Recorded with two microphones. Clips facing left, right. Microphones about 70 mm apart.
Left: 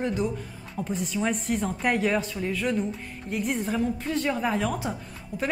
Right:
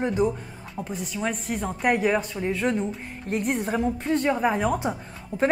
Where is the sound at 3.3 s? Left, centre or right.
Right.